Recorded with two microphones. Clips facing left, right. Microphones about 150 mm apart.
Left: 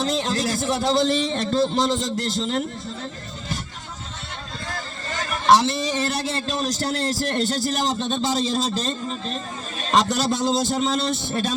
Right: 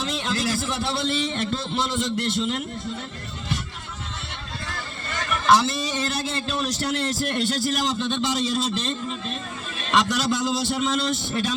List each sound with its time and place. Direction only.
0.0 s a man's voice: 40° left (ahead or behind)
4.7 s a man's voice: 40° left (ahead or behind)